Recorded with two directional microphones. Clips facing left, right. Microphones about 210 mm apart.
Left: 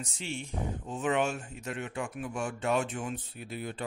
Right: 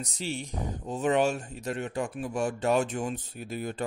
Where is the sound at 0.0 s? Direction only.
40° right (ahead or behind).